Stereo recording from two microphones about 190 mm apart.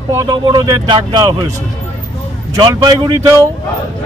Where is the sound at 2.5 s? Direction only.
20° right (ahead or behind).